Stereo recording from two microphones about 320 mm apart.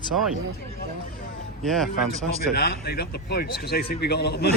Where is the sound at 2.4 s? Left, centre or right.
Left.